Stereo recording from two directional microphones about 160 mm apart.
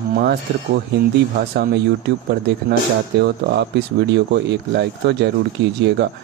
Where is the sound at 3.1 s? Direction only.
90° right.